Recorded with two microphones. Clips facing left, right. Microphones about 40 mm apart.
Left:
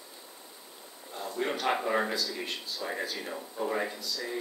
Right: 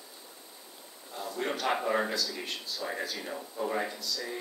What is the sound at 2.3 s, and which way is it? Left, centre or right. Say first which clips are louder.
Speech: left 1 dB; centre.